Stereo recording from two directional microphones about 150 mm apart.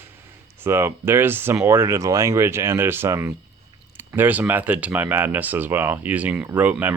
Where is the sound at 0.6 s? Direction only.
15° right (ahead or behind).